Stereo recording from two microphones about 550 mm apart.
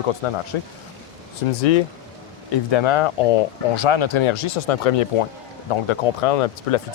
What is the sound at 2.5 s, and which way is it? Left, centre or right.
Speech, left.